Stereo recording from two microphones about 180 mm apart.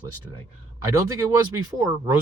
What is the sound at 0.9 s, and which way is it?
Speech, 20° right (ahead or behind).